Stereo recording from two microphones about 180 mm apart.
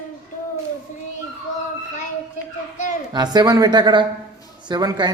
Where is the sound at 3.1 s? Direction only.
25° right (ahead or behind).